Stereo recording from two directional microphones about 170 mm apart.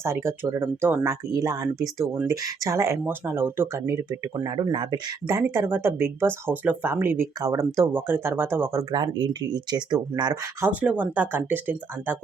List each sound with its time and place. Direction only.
0.0 s speech: 15° right (ahead or behind)
5.4 s speech: 15° right (ahead or behind)
10.7 s speech: 10° right (ahead or behind)